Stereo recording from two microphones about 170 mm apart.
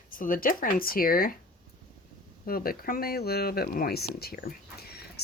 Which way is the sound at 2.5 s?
60° left (ahead or behind).